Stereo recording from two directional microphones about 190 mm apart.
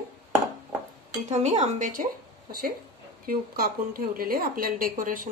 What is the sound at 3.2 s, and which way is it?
Speech, 50° right (ahead or behind).